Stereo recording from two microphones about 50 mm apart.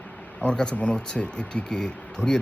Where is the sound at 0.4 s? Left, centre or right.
Centre.